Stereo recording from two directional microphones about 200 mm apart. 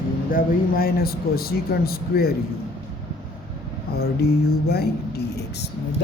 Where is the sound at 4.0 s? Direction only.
50° left (ahead or behind).